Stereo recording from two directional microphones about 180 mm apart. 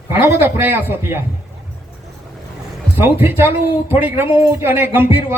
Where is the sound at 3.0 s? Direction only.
10° right (ahead or behind).